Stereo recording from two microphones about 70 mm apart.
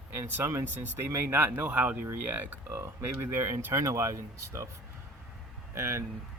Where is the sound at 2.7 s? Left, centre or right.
Right.